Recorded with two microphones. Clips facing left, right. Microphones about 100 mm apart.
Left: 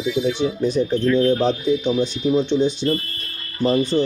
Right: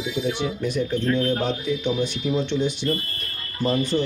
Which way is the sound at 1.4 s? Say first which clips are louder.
Left 5 dB; 20° left (ahead or behind).